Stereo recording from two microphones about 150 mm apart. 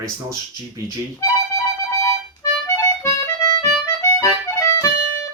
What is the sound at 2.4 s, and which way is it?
Music, 20° left (ahead or behind).